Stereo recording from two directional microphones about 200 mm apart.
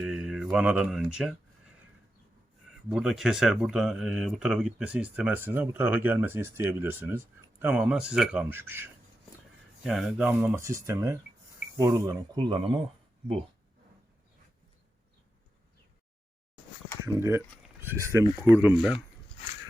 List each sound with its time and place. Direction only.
0.0 s mantra: centre (ahead or behind)
0.5 s speech: 5° right (ahead or behind)
2.9 s speech: 5° right (ahead or behind); by 12.7 s 25° right (ahead or behind)
17.1 s speech: 10° right (ahead or behind)